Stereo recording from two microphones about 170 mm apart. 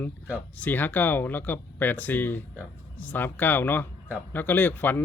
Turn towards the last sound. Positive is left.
turn(degrees=10)  # may be behind; listen again after turning